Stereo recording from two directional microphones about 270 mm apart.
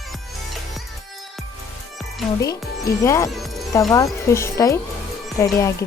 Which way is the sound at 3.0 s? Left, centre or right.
Centre.